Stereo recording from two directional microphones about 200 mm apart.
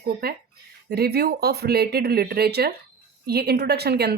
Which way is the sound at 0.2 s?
50° right (ahead or behind).